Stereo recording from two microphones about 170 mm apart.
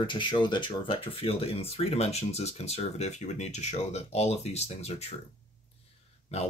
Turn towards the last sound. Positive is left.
turn(degrees=40)  # may be behind; listen again after turning